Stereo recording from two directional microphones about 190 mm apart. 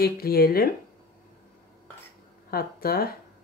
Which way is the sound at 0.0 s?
55° left (ahead or behind).